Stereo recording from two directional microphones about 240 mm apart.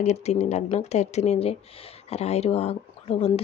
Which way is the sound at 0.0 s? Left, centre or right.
Left.